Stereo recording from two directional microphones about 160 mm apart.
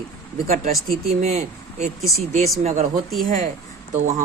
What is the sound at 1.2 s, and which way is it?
Speech, 45° right (ahead or behind).